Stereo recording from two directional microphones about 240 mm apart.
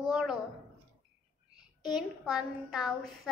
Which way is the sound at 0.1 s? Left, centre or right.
Centre.